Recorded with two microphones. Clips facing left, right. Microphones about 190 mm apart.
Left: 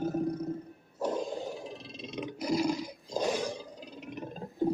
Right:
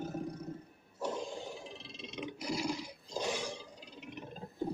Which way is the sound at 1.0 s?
40° left (ahead or behind).